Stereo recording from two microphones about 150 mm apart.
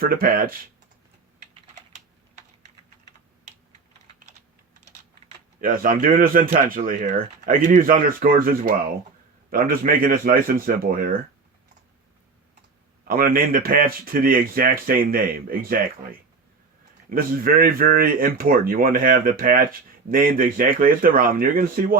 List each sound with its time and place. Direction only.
0.0 s speech: 75° right (ahead or behind)
5.5 s speech: 70° right (ahead or behind)
13.1 s speech: 75° right (ahead or behind)
17.1 s speech: 75° right (ahead or behind)